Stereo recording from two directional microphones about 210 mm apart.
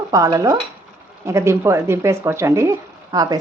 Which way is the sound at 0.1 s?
15° right (ahead or behind).